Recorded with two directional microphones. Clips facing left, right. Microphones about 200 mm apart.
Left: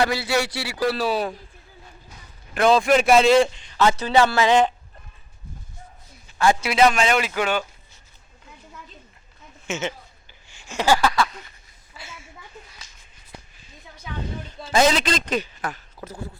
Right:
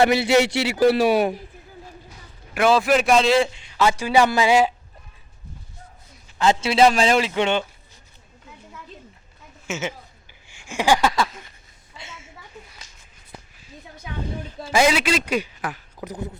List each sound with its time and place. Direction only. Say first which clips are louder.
0.0 s speech: right 5 dB; 20° right (ahead or behind)
2.6 s a man's voice: left 1 dB; 5° right (ahead or behind)
6.4 s speech: right 1 dB; 25° right (ahead or behind)
9.6 s speech: left 1 dB; 5° right (ahead or behind)
10.4 s a sound: right 1 dB; 15° right (ahead or behind)
14.6 s a man's voice: even; 10° right (ahead or behind)